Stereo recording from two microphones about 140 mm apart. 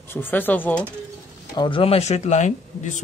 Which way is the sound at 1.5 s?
35° left (ahead or behind).